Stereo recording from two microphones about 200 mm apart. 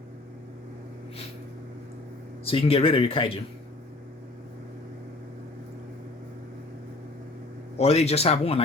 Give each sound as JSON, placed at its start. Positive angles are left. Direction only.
{"t": 2.4, "sound": "speech", "side_deg": 30}
{"t": 7.8, "sound": "speech", "side_deg": 30}